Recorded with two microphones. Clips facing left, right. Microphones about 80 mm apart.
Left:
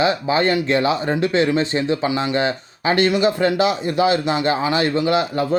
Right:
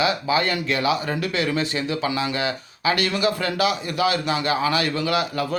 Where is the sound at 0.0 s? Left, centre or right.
Left.